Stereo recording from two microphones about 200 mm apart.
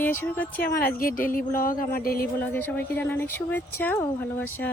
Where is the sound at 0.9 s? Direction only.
45° left (ahead or behind).